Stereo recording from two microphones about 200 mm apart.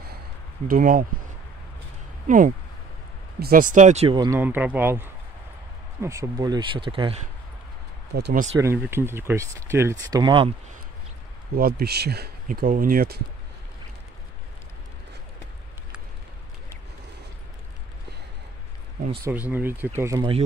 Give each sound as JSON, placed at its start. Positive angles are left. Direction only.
{"t": 0.7, "sound": "speech", "side_deg": -45}
{"t": 2.2, "sound": "speech", "side_deg": -40}
{"t": 4.4, "sound": "speech", "side_deg": -10}
{"t": 8.1, "sound": "speech", "side_deg": -50}
{"t": 8.5, "sound": "speech", "side_deg": -15}
{"t": 11.5, "sound": "speech", "side_deg": -50}
{"t": 19.5, "sound": "speech", "side_deg": -10}